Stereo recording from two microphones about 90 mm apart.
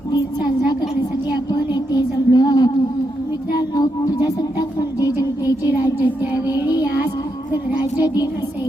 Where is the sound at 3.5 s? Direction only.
45° left (ahead or behind).